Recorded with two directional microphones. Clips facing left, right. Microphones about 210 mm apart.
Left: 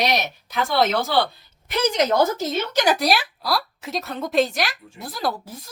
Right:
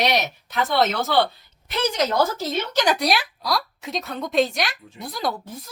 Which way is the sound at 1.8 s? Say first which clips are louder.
Left 2 dB; 20° left (ahead or behind).